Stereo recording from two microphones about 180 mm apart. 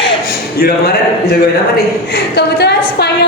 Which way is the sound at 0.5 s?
60° left (ahead or behind).